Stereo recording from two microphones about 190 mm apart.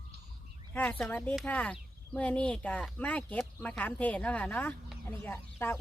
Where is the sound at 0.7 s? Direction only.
5° left (ahead or behind).